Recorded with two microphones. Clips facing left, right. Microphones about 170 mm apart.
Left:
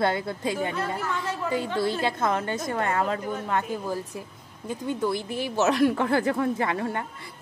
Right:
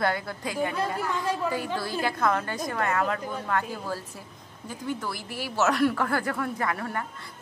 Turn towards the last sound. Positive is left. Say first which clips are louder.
# left 3 dB
turn(degrees=20)  # may be behind; listen again after turning